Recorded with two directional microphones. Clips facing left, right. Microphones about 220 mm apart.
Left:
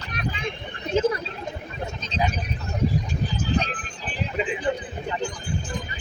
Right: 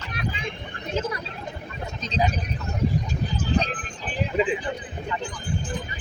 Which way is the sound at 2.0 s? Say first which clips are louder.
Right 2 dB; 40° right (ahead or behind).